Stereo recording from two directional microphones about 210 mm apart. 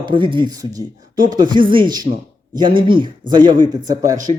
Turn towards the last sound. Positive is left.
turn(degrees=-15)  # may be behind; listen again after turning